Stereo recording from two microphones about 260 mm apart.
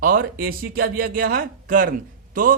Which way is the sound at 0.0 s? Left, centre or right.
Right.